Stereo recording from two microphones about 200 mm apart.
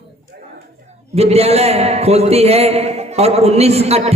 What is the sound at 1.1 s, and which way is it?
A man's voice, 30° right (ahead or behind).